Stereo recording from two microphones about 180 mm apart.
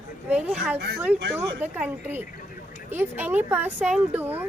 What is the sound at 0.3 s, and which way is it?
A woman's voice, 5° right (ahead or behind).